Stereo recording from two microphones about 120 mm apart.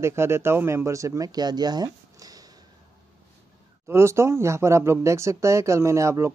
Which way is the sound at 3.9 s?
20° right (ahead or behind).